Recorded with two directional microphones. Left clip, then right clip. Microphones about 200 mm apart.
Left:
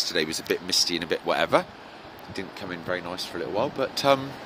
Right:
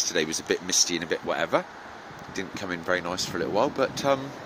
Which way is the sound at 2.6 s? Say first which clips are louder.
Right 4 dB; 15° right (ahead or behind).